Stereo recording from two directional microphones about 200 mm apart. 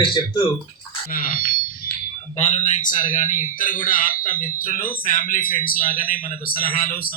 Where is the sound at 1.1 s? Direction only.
45° left (ahead or behind).